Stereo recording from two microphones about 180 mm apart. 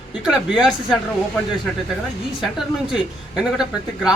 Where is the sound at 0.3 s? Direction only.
5° right (ahead or behind).